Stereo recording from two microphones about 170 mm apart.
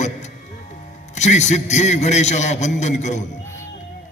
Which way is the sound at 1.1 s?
45° left (ahead or behind).